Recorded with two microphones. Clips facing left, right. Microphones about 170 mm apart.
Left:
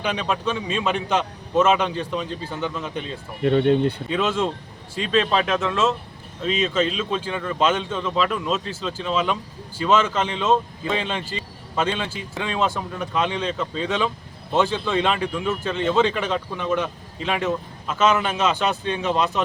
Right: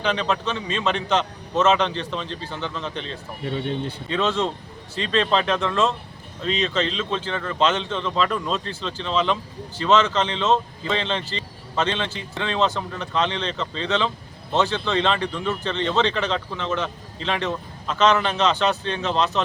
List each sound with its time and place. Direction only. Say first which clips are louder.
0.0 s speech: right 1 dB; 10° left (ahead or behind)
3.4 s speech: left 9 dB; 60° left (ahead or behind)
4.1 s speech: even; 10° left (ahead or behind)